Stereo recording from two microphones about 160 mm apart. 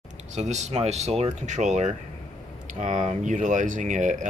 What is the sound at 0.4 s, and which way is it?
Speech, 45° right (ahead or behind).